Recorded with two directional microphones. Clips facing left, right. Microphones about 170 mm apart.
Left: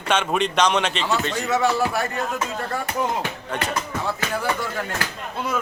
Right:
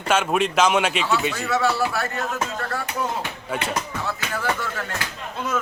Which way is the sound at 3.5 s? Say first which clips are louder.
Even; 5° right (ahead or behind).